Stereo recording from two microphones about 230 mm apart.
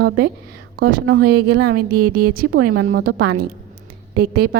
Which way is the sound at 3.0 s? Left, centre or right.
Right.